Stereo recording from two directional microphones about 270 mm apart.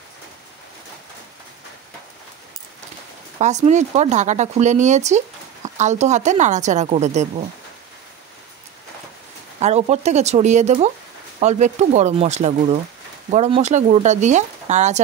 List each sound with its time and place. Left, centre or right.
3.3 s speech: right
9.6 s speech: right